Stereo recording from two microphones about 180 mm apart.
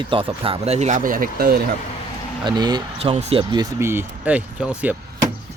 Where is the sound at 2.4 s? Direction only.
25° right (ahead or behind).